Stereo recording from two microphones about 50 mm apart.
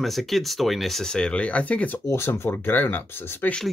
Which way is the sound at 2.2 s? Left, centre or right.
Left.